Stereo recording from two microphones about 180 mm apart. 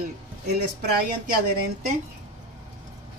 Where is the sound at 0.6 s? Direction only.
60° right (ahead or behind).